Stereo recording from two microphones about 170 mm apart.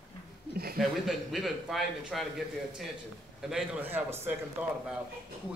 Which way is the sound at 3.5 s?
10° right (ahead or behind).